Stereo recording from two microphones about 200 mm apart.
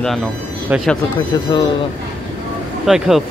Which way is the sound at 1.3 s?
20° left (ahead or behind).